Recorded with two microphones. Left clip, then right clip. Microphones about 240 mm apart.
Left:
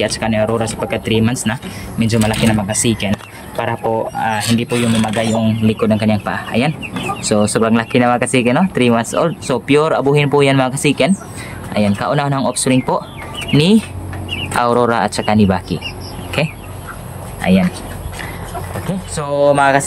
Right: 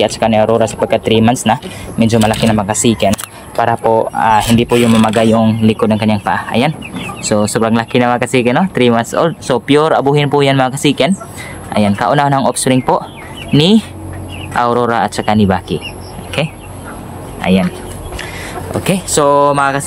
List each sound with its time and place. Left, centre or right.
0.0 s speech: centre
4.6 s speech: right
5.4 s speech: centre
19.3 s speech: centre